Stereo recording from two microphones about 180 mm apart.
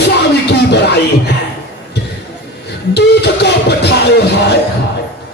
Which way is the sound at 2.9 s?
65° left (ahead or behind).